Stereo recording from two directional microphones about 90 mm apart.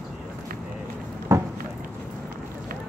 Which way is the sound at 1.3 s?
35° right (ahead or behind).